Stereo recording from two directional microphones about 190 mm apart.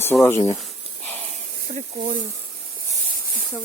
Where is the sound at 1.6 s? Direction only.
45° right (ahead or behind).